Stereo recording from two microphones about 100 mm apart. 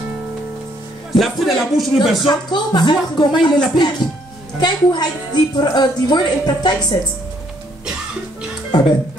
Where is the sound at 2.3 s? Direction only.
45° left (ahead or behind).